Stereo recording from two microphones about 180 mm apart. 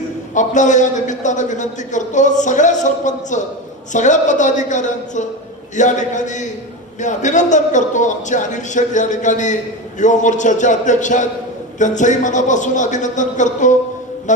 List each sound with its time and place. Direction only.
0.3 s a man's voice: 45° left (ahead or behind)